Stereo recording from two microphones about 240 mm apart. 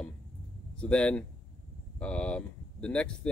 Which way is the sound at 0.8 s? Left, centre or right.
Centre.